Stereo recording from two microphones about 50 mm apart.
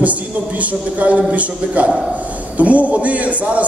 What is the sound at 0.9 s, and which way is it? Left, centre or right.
A man's voice, right.